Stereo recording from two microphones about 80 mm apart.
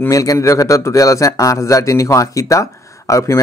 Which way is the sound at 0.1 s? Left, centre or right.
Left.